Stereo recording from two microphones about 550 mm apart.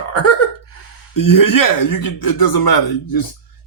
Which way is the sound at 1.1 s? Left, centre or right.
Left.